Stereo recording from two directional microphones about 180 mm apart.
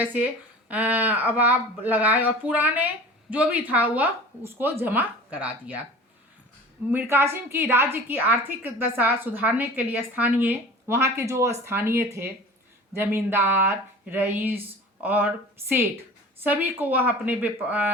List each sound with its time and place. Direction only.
0.0 s speech: 10° right (ahead or behind)
6.9 s speech: 15° right (ahead or behind)
16.4 s speech: 10° right (ahead or behind)